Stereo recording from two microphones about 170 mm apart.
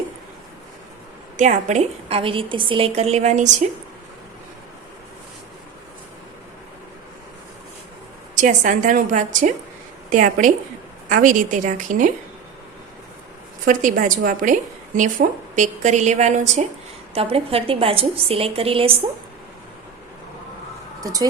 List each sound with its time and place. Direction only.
1.4 s a woman's voice: 45° right (ahead or behind)
8.4 s a woman's voice: 50° right (ahead or behind)
13.7 s a woman's voice: 50° right (ahead or behind); by 18.9 s 35° right (ahead or behind)
21.0 s speech: 20° right (ahead or behind)